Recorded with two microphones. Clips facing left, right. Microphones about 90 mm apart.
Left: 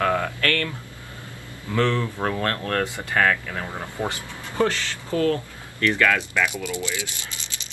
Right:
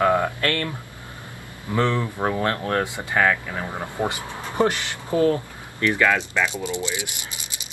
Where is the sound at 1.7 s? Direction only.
20° right (ahead or behind).